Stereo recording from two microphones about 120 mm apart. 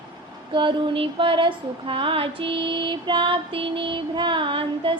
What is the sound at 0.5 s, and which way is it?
Female singing, 45° right (ahead or behind).